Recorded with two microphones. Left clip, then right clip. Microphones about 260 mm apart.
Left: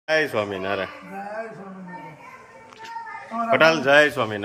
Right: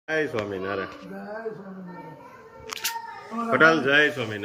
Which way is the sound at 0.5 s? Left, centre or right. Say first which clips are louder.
Left 3 dB; centre.